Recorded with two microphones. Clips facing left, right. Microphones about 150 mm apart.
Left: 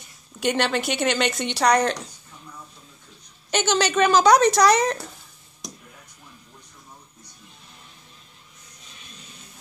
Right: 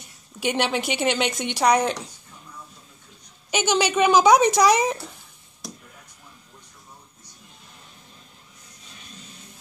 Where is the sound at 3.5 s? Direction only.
10° right (ahead or behind).